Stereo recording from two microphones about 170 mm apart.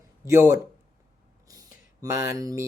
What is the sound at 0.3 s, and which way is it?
Mantra, 15° right (ahead or behind).